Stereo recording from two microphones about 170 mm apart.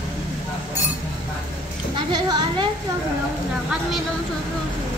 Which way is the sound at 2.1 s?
25° right (ahead or behind).